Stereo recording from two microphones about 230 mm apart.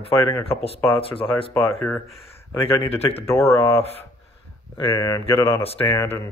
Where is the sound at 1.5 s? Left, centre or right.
Centre.